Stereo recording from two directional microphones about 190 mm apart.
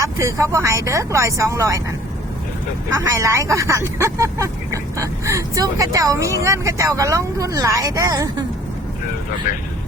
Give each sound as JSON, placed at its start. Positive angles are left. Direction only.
{"t": 0.0, "sound": "speech", "side_deg": -15}
{"t": 3.2, "sound": "speech", "side_deg": -15}